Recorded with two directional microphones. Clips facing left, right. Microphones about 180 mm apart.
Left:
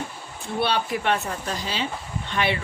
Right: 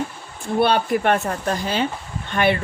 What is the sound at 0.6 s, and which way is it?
Speech, 50° right (ahead or behind).